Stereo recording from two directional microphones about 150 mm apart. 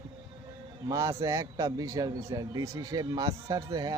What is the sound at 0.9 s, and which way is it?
Speech, 20° right (ahead or behind).